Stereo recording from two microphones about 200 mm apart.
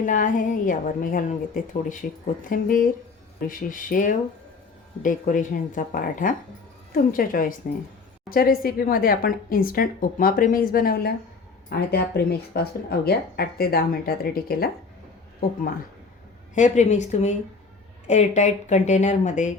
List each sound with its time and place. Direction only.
0.0 s a woman's voice: 40° left (ahead or behind)
16.6 s a woman's voice: 35° left (ahead or behind)